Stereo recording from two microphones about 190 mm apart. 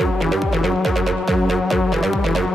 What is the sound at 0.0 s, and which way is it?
Music, centre (ahead or behind).